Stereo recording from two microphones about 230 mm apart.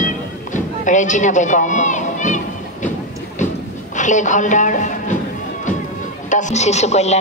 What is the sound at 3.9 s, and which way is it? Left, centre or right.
A woman's voice, left.